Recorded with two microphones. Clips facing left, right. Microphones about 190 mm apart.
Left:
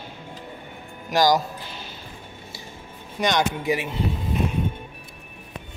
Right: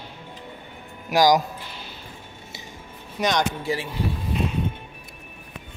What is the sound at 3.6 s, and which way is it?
Speech, 20° left (ahead or behind).